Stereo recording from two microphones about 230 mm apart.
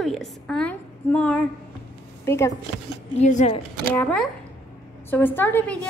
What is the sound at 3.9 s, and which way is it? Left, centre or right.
A woman's voice, centre.